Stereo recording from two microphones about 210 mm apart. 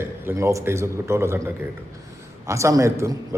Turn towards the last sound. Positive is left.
turn(degrees=-15)  # may be behind; listen again after turning